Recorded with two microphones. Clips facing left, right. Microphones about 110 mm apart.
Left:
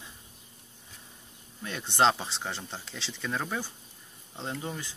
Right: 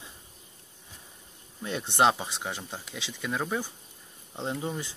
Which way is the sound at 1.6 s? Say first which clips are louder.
Right 1 dB; 20° right (ahead or behind).